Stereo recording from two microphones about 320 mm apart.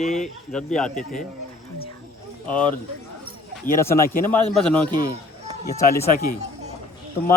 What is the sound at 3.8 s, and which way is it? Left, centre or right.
A man's voice, centre.